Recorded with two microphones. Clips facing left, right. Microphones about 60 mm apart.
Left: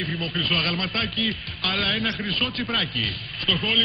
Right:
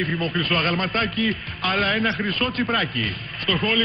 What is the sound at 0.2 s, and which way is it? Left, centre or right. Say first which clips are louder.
A man's voice: right 1 dB; right.